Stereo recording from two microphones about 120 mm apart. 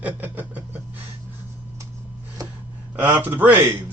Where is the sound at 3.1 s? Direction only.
15° right (ahead or behind).